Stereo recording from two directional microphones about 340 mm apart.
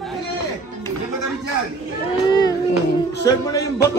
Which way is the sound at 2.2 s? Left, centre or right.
Centre.